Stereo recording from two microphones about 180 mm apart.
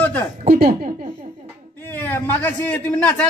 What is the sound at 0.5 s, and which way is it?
Speech, 55° right (ahead or behind).